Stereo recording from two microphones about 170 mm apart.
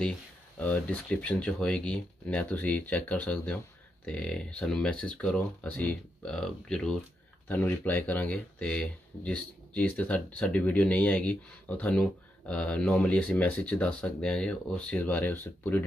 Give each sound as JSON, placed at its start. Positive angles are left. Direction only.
{"t": 0.6, "sound": "speech", "side_deg": 10}